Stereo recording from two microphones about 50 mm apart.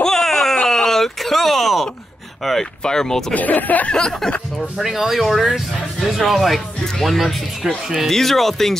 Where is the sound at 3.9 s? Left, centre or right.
Centre.